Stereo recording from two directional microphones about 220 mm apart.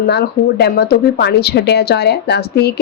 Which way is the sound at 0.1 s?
45° left (ahead or behind).